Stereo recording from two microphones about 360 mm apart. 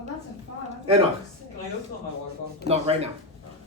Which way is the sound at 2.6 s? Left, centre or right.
Centre.